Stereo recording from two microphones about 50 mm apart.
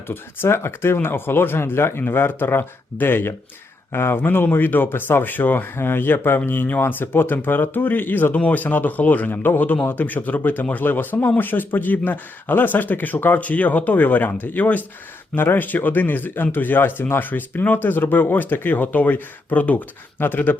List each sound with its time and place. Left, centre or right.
0.1 s speech: left
5.7 s speech: left
15.4 s speech: left